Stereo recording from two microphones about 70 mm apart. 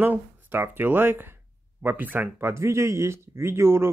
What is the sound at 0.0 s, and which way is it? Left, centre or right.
Speech, right.